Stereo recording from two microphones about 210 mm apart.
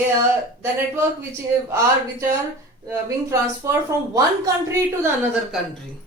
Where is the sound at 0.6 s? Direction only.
10° right (ahead or behind).